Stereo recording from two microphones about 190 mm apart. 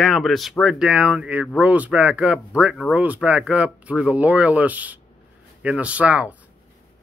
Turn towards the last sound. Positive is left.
turn(degrees=-5)  # may be behind; listen again after turning